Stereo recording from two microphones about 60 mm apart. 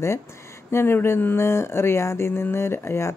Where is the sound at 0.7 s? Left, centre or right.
Left.